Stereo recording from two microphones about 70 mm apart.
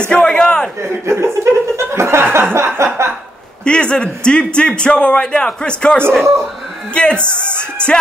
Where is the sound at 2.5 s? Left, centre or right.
Right.